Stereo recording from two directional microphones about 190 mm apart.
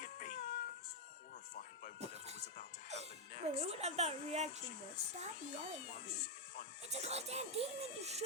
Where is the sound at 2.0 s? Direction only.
35° right (ahead or behind).